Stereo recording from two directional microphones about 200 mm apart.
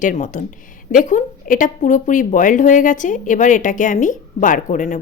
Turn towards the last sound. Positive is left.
turn(degrees=40)  # may be behind; listen again after turning